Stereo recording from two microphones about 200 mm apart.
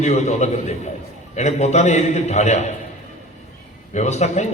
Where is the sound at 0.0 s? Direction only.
35° left (ahead or behind).